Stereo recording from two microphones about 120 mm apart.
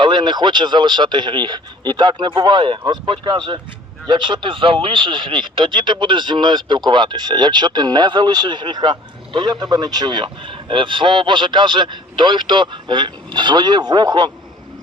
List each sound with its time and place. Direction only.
0.0 s speech: 40° right (ahead or behind)